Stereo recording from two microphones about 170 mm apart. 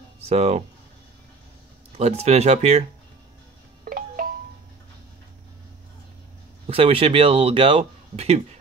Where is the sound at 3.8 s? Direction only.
55° right (ahead or behind).